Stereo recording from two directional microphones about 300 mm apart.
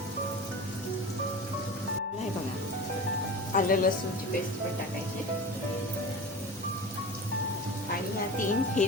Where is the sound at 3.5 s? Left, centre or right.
Left.